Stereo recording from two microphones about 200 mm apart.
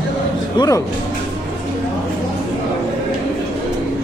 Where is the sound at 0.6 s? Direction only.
25° left (ahead or behind).